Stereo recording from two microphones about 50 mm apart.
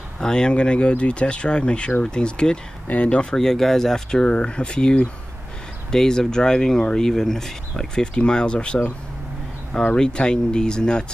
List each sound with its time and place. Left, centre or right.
0.2 s speech: centre
3.3 s speech: centre; by 8.9 s left
9.8 s speech: centre